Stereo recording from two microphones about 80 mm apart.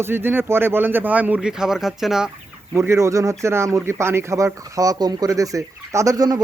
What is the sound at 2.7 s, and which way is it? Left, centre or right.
Speech, right.